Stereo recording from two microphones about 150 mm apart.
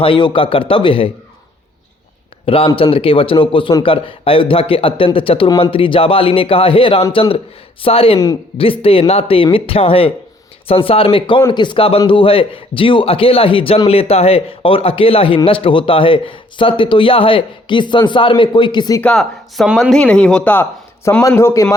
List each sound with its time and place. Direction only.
0.0 s a man's voice: 35° left (ahead or behind)
2.5 s a man's voice: 35° left (ahead or behind)
19.0 s speech: centre (ahead or behind); by 21.8 s 20° left (ahead or behind)